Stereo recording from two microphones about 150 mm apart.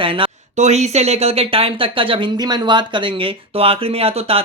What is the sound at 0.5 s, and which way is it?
Speech, 50° right (ahead or behind).